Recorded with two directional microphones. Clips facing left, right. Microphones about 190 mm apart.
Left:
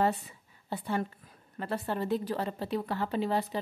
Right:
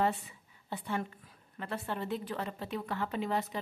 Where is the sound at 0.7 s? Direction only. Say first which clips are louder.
Left 4 dB; 35° left (ahead or behind).